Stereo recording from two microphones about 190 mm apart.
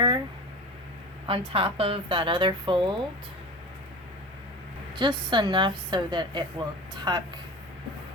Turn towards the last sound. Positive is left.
turn(degrees=-25)  # may be behind; listen again after turning